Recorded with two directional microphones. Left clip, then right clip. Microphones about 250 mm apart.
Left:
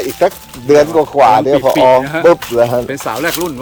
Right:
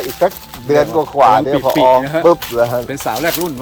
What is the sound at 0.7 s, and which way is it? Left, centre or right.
Speech, left.